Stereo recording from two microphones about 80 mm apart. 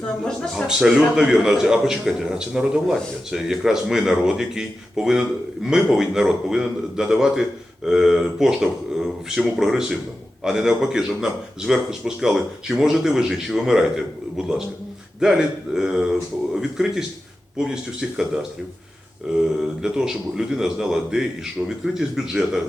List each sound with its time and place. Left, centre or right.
0.5 s a man's voice: centre
19.3 s a man's voice: centre